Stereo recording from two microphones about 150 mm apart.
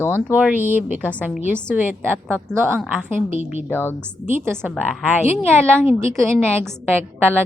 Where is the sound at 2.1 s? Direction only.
15° right (ahead or behind).